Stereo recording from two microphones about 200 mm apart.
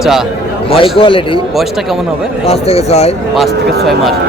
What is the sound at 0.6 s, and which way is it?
Speech, 25° left (ahead or behind).